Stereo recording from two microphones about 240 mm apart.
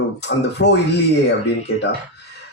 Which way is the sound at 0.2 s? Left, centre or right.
Left.